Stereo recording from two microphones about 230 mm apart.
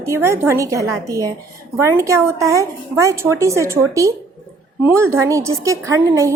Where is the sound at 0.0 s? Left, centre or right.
Centre.